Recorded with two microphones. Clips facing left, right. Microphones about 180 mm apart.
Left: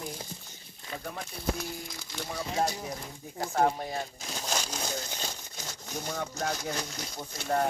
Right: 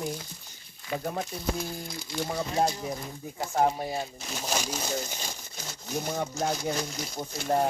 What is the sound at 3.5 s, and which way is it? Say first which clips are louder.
Speech: right 1 dB; 10° right (ahead or behind).